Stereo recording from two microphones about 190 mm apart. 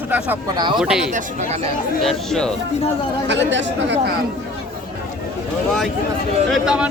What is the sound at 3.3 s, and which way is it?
Speech, 70° right (ahead or behind).